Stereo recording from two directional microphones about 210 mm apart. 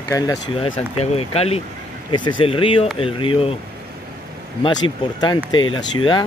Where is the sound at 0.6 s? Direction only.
25° left (ahead or behind).